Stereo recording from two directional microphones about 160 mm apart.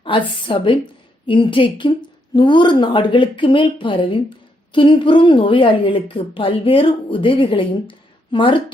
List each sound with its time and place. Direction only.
0.0 s a woman's voice: 30° left (ahead or behind)